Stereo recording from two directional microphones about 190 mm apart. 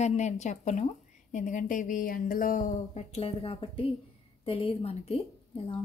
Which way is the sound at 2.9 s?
35° left (ahead or behind).